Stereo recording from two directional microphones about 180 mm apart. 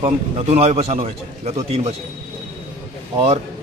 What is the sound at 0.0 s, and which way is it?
A man's voice, 40° right (ahead or behind).